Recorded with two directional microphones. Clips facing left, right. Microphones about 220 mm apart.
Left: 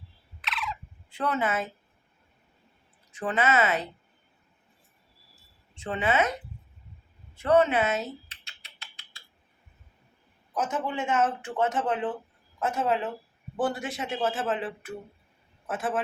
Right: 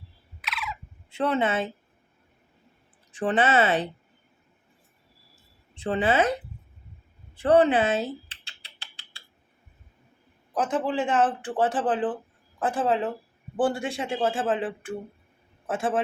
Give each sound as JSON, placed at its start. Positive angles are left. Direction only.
{"t": 0.4, "sound": "fowl", "side_deg": -5}
{"t": 1.1, "sound": "a man's voice", "side_deg": -25}
{"t": 3.1, "sound": "speech", "side_deg": -30}
{"t": 5.7, "sound": "speech", "side_deg": -35}
{"t": 7.3, "sound": "rodents", "side_deg": -30}
{"t": 10.5, "sound": "a man's voice", "side_deg": -35}